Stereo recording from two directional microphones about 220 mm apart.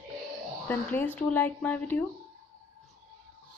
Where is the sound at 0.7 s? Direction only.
10° left (ahead or behind).